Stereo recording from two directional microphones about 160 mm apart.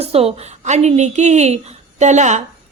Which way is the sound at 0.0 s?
40° right (ahead or behind).